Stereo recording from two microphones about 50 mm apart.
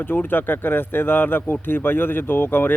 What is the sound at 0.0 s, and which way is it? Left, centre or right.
A man's voice, left.